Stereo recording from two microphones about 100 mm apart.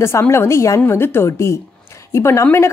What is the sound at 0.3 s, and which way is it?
A woman's voice, 25° left (ahead or behind).